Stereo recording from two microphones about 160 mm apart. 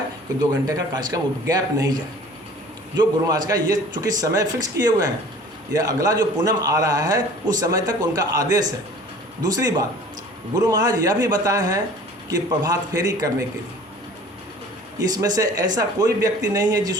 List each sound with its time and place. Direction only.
0.7 s a man's voice: 25° right (ahead or behind)
2.9 s a man's voice: 25° right (ahead or behind)
14.9 s a man's voice: 25° right (ahead or behind)